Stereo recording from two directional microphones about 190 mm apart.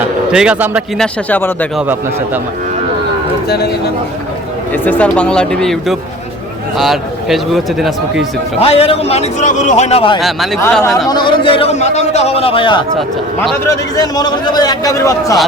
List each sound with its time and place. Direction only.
0.3 s a man's voice: 5° right (ahead or behind)
1.0 s speech: 10° left (ahead or behind)
3.5 s a man's voice: 55° left (ahead or behind)
4.7 s a man's voice: 10° left (ahead or behind)
8.5 s a man's voice: 30° left (ahead or behind)
10.2 s a man's voice: centre (ahead or behind)
11.1 s a man's voice: 25° left (ahead or behind)
13.0 s a man's voice: centre (ahead or behind)
13.7 s a man's voice: 20° left (ahead or behind)